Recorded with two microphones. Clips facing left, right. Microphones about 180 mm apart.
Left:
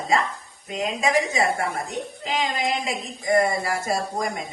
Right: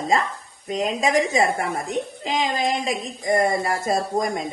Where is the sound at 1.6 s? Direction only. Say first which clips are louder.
Right 2 dB; 20° right (ahead or behind).